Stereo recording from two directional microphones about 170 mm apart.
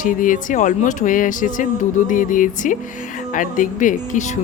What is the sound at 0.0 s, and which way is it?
Speech, 50° left (ahead or behind).